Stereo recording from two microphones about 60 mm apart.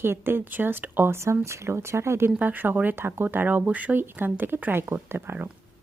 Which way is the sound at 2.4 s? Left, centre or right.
Right.